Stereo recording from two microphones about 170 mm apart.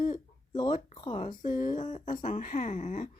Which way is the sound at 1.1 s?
50° left (ahead or behind).